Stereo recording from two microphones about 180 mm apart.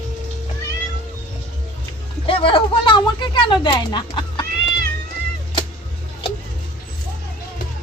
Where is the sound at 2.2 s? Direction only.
30° left (ahead or behind).